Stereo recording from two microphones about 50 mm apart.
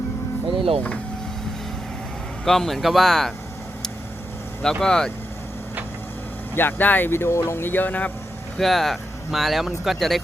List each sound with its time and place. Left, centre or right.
2.4 s speech: centre
4.6 s speech: centre
6.5 s speech: left
7.1 s speech: left
7.6 s speech: left
8.5 s speech: centre